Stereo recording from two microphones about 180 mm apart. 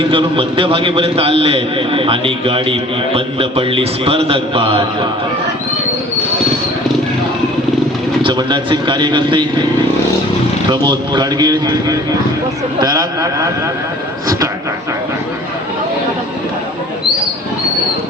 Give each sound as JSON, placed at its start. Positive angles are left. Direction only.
{"t": 0.0, "sound": "a man's voice", "side_deg": -30}
{"t": 8.2, "sound": "a man's voice", "side_deg": -25}
{"t": 10.7, "sound": "a man's voice", "side_deg": -25}
{"t": 14.3, "sound": "a sound", "side_deg": -20}